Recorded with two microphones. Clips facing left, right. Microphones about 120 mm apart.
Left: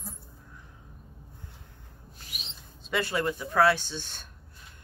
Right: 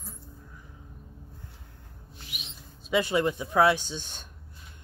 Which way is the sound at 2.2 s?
35° left (ahead or behind).